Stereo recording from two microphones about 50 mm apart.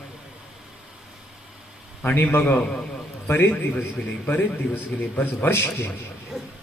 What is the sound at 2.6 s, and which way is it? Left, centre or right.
Speech, centre.